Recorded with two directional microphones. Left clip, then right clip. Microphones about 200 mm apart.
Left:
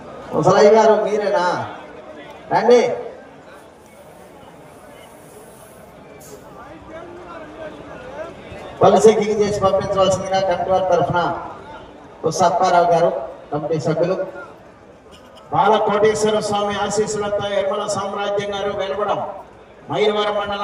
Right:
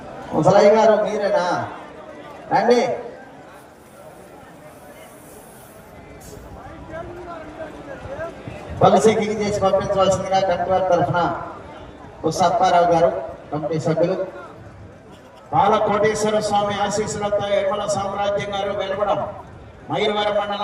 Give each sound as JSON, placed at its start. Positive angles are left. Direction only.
{"t": 0.4, "sound": "a man's voice", "side_deg": 25}
{"t": 8.8, "sound": "a man's voice", "side_deg": 25}
{"t": 15.5, "sound": "a man's voice", "side_deg": 25}